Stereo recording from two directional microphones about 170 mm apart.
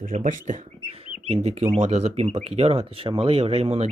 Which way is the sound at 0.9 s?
35° right (ahead or behind).